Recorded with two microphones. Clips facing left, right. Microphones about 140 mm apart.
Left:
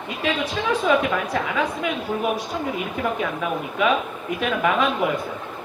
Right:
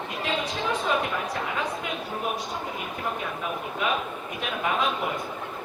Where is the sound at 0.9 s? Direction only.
90° left.